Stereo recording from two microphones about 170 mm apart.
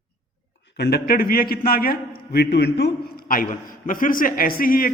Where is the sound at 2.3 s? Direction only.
80° left.